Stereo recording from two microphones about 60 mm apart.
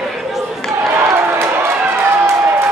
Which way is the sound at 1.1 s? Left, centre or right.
Right.